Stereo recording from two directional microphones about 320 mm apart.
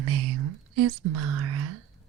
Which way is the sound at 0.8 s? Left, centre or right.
Right.